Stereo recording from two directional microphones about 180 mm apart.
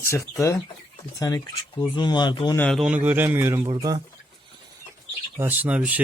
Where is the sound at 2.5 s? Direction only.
5° left (ahead or behind); by 3.6 s 10° right (ahead or behind).